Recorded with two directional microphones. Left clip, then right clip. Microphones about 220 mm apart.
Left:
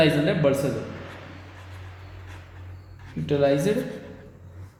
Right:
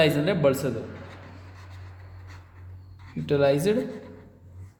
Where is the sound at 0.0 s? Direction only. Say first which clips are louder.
Left 1 dB; 60° right (ahead or behind).